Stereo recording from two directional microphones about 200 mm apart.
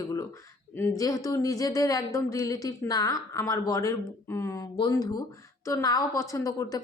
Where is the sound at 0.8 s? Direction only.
15° left (ahead or behind).